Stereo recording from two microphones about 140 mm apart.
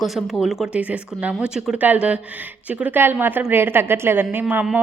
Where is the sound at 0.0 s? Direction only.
Centre (ahead or behind).